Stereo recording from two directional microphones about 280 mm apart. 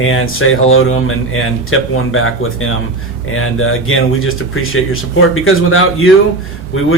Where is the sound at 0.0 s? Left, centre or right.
Left.